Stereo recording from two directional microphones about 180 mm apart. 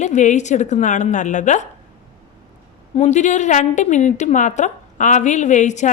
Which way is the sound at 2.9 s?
40° left (ahead or behind).